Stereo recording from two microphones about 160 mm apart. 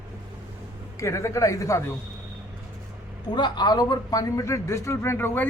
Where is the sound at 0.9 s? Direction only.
20° left (ahead or behind).